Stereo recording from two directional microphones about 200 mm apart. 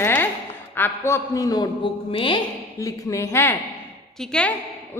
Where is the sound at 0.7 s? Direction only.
10° left (ahead or behind).